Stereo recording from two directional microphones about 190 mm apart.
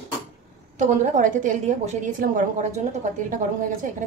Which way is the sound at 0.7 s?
40° right (ahead or behind).